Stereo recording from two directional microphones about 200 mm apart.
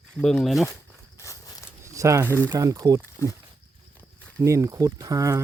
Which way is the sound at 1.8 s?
15° right (ahead or behind).